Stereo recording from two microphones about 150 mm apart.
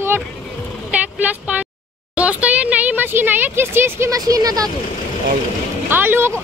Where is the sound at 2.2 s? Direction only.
10° right (ahead or behind); by 4.7 s 25° right (ahead or behind).